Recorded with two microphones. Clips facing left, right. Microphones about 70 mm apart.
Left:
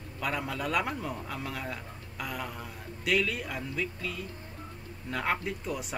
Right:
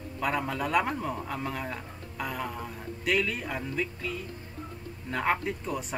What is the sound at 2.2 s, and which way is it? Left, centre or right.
A man's voice, centre.